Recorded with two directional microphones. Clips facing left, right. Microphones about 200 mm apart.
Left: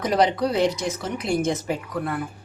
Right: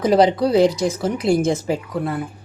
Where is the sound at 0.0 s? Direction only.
30° right (ahead or behind).